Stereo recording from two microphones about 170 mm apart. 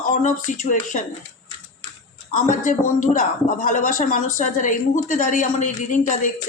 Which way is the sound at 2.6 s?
50° left (ahead or behind).